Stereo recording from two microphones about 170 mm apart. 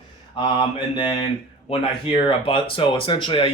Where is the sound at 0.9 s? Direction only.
30° left (ahead or behind).